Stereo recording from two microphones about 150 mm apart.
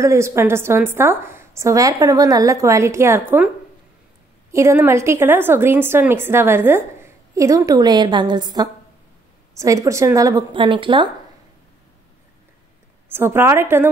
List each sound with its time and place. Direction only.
0.0 s a woman's voice: 20° right (ahead or behind)
4.5 s a woman's voice: 20° right (ahead or behind)
13.1 s a woman's voice: 15° right (ahead or behind)